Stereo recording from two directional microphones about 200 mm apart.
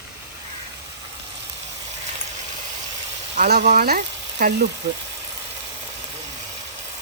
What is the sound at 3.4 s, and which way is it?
Speech, 55° right (ahead or behind).